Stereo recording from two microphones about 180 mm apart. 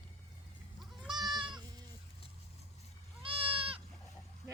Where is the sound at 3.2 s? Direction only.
30° right (ahead or behind).